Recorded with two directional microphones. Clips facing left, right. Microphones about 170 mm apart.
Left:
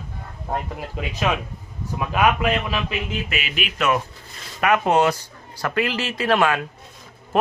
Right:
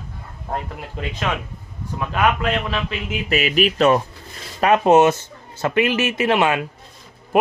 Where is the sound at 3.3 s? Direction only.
40° right (ahead or behind); by 6.6 s 20° right (ahead or behind).